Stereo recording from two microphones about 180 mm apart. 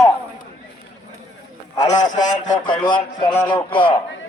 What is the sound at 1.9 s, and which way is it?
Speech, 45° left (ahead or behind).